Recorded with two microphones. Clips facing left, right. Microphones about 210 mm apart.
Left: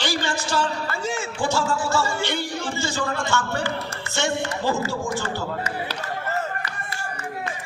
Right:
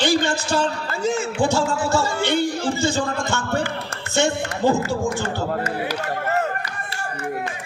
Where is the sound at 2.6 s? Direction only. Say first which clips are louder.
Right 5 dB; 35° right (ahead or behind).